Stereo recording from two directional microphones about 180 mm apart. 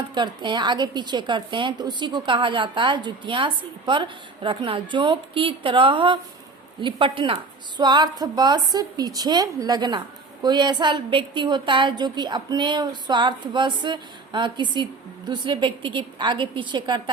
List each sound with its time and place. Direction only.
0.1 s a woman's voice: 25° right (ahead or behind)